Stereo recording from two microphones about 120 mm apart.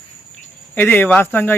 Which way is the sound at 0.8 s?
15° left (ahead or behind).